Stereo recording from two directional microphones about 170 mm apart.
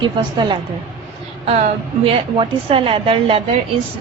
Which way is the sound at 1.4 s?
40° right (ahead or behind).